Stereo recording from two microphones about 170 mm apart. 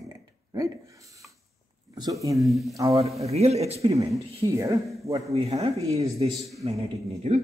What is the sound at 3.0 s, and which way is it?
Speech, 40° right (ahead or behind).